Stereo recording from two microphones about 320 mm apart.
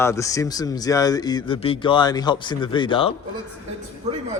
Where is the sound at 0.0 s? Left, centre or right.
Centre.